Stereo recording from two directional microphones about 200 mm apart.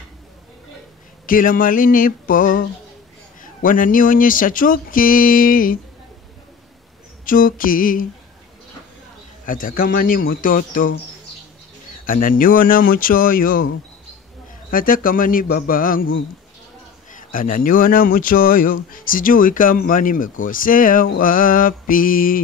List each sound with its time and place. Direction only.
1.2 s speech: 45° left (ahead or behind)
3.6 s speech: 45° left (ahead or behind)
7.2 s speech: 45° left (ahead or behind)
9.5 s speech: 45° left (ahead or behind)
14.7 s speech: 45° left (ahead or behind)
17.1 s speech: 45° left (ahead or behind)